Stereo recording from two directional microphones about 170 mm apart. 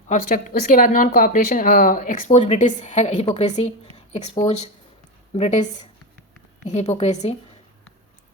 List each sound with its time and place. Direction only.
0.1 s a woman's voice: 50° left (ahead or behind)
3.9 s a sound: 40° left (ahead or behind)
5.3 s a woman's voice: 40° left (ahead or behind)